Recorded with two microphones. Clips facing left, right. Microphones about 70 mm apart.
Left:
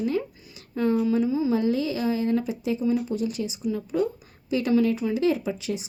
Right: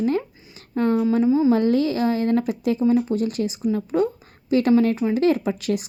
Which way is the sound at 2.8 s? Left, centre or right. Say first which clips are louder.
Right 5 dB; right.